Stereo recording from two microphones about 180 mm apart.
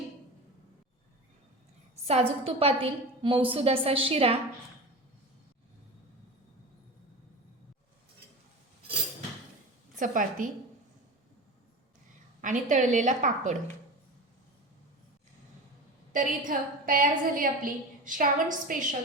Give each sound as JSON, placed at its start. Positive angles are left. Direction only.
{"t": 2.0, "sound": "a woman's voice", "side_deg": -35}
{"t": 10.0, "sound": "a woman's voice", "side_deg": -45}
{"t": 12.4, "sound": "a woman's voice", "side_deg": -45}
{"t": 16.1, "sound": "a woman's voice", "side_deg": -50}